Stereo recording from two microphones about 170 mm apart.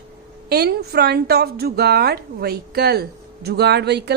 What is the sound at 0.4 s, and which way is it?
A woman's voice, 70° right (ahead or behind).